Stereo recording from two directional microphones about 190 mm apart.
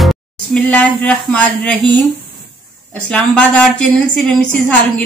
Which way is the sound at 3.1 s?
5° left (ahead or behind).